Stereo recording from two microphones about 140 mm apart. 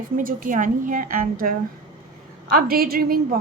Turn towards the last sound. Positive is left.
turn(degrees=-90)